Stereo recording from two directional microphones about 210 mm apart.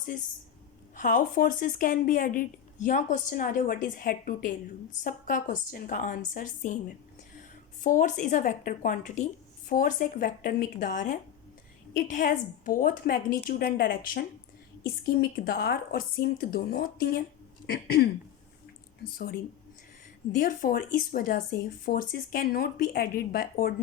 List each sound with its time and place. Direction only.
0.9 s speech: 40° left (ahead or behind)
7.8 s a woman's voice: 35° left (ahead or behind)
20.3 s speech: 40° left (ahead or behind)